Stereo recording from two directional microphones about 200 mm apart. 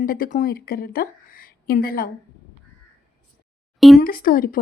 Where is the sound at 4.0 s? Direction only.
45° left (ahead or behind).